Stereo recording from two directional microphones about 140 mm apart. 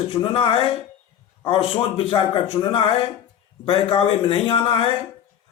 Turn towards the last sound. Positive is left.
turn(degrees=40)  # may be behind; listen again after turning